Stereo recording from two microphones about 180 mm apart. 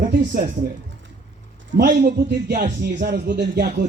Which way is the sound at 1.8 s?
55° right (ahead or behind).